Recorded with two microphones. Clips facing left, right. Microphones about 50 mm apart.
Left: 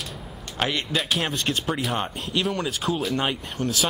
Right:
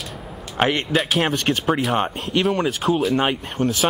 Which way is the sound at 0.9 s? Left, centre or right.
Centre.